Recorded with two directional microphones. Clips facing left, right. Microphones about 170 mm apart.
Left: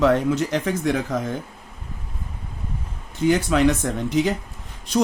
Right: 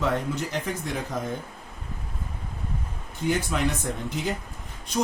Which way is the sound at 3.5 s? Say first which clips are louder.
Left 8 dB; 90° left.